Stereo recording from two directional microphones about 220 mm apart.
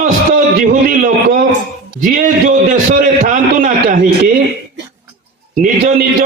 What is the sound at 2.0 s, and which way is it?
A man's voice, 35° right (ahead or behind).